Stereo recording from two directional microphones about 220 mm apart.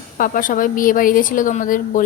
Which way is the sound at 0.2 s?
40° left (ahead or behind).